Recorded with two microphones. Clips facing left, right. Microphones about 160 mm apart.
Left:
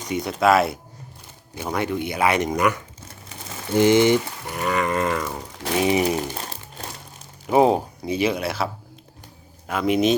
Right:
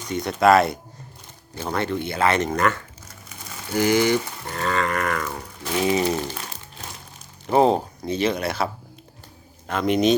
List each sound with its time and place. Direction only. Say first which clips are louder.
0.1 s speech: right 2 dB; 5° left (ahead or behind)
3.0 s crumpling: left 2 dB; 30° left (ahead or behind)
4.4 s speech: left 1 dB; 15° left (ahead or behind)
7.4 s speech: left 1 dB; 10° left (ahead or behind)